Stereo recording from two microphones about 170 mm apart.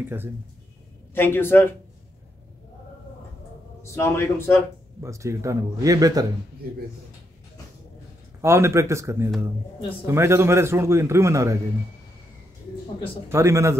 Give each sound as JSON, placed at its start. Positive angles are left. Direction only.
{"t": 1.1, "sound": "a man's voice", "side_deg": 15}
{"t": 3.8, "sound": "a man's voice", "side_deg": 15}
{"t": 5.0, "sound": "speech", "side_deg": -20}
{"t": 8.4, "sound": "a man's voice", "side_deg": -15}
{"t": 13.3, "sound": "a man's voice", "side_deg": -15}